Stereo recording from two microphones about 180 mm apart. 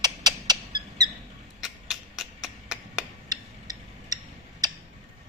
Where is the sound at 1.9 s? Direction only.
Centre (ahead or behind).